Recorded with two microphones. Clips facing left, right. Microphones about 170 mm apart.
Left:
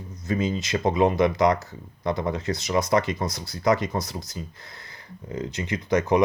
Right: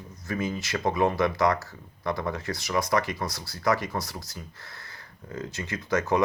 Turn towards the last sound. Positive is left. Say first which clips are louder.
# left 4 dB
turn(degrees=20)  # may be behind; listen again after turning